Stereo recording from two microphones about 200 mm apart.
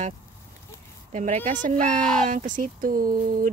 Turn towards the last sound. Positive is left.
turn(degrees=-45)  # may be behind; listen again after turning